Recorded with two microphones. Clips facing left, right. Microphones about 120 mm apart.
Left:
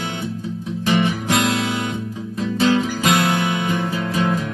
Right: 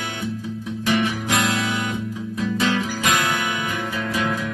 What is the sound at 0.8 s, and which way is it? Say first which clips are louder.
Guitar: left 2 dB; 30° left (ahead or behind).